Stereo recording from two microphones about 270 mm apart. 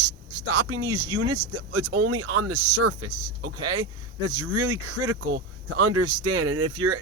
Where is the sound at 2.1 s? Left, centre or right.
Right.